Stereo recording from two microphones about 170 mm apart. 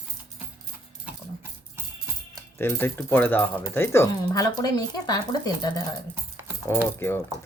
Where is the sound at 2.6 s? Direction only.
15° left (ahead or behind).